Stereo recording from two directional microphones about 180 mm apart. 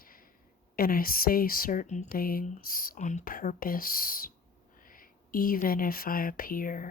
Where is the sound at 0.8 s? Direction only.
55° left (ahead or behind).